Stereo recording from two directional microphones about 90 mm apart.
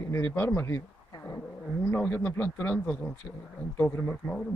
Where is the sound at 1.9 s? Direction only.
20° left (ahead or behind).